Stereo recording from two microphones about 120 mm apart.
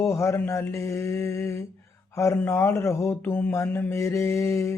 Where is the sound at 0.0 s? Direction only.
25° left (ahead or behind).